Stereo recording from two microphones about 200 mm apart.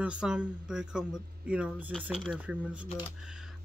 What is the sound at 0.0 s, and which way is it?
Speech, 5° right (ahead or behind).